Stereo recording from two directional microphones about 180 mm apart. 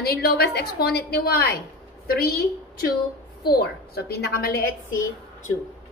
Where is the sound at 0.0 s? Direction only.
60° left (ahead or behind).